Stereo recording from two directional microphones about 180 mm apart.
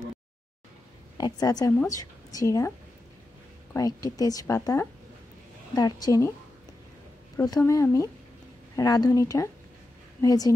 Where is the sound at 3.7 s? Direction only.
20° left (ahead or behind).